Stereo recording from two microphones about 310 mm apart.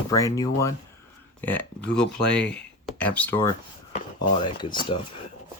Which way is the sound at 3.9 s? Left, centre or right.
Centre.